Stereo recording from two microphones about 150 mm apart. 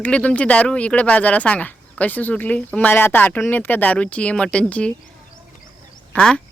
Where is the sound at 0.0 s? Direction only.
10° left (ahead or behind).